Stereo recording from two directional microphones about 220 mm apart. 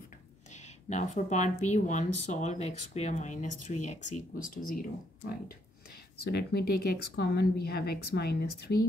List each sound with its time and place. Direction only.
0.5 s speech: 30° left (ahead or behind)
6.3 s speech: 45° left (ahead or behind)